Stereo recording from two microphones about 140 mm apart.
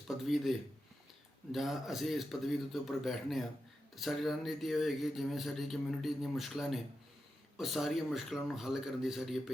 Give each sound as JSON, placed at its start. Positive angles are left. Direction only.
{"t": 0.3, "sound": "speech", "side_deg": 0}
{"t": 1.5, "sound": "speech", "side_deg": 0}